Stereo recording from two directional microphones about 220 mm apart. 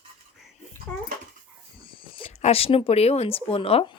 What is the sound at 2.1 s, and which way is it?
Speech, 25° left (ahead or behind).